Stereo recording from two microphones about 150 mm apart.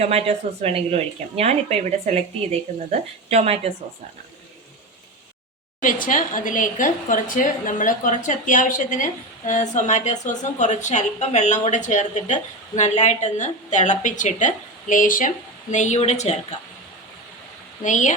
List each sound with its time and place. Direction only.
0.0 s speech: 45° right (ahead or behind)
5.8 s a woman's voice: 60° left (ahead or behind)
15.7 s speech: 50° left (ahead or behind)
17.8 s a woman's voice: 55° left (ahead or behind)